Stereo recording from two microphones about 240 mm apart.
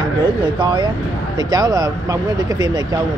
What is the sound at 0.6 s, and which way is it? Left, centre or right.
Speech, centre.